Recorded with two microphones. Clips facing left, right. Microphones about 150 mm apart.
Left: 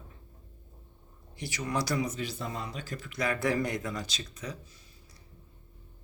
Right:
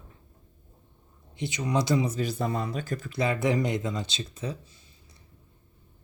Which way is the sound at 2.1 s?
50° right (ahead or behind).